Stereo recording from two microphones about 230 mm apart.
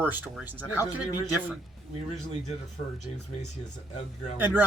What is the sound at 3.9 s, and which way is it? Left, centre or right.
Speech, left.